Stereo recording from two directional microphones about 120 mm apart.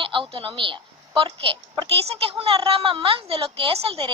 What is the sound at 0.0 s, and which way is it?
A woman's voice, 45° right (ahead or behind).